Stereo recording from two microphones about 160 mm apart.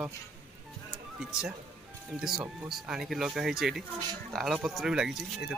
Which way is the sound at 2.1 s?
5° right (ahead or behind).